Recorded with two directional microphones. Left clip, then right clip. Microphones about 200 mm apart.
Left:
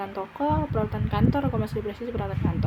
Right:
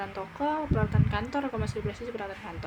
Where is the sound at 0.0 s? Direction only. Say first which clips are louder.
Left 3 dB; centre (ahead or behind).